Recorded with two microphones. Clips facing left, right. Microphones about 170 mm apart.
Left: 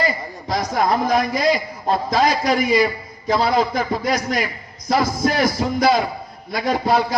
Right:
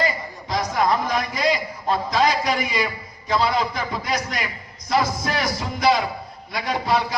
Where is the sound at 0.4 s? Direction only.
45° left (ahead or behind).